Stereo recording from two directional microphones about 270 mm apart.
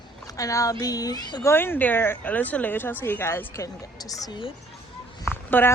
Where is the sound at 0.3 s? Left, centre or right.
Centre.